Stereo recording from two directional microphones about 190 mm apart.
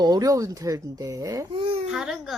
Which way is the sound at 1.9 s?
5° right (ahead or behind).